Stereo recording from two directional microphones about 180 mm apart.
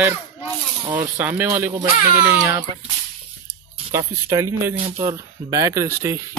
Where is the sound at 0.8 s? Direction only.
10° right (ahead or behind).